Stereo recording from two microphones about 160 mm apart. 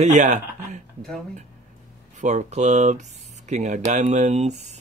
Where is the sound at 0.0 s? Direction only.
50° right (ahead or behind).